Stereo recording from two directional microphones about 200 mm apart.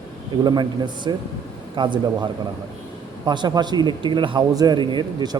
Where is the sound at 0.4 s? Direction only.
20° right (ahead or behind).